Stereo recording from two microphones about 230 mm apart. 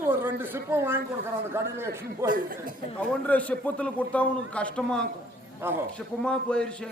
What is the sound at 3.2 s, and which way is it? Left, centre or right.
A man's voice, centre.